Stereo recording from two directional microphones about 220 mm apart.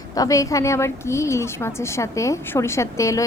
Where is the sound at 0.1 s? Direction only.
15° left (ahead or behind).